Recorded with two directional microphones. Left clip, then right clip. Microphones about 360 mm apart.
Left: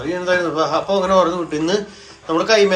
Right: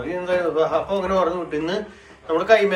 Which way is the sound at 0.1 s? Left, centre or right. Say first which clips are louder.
Left 3 dB; centre.